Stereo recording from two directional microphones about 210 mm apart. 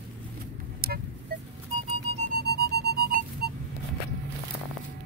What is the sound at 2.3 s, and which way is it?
Music, 50° right (ahead or behind).